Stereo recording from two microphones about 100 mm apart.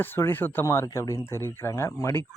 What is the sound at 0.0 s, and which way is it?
A man's voice, 20° left (ahead or behind).